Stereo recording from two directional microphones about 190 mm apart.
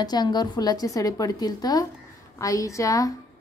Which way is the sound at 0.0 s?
20° left (ahead or behind).